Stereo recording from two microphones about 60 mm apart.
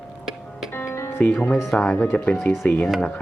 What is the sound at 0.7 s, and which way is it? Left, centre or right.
Music, left.